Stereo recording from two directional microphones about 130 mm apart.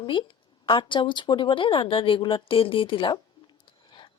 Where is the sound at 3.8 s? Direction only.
40° left (ahead or behind).